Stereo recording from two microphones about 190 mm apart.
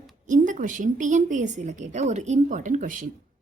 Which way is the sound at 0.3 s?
40° right (ahead or behind).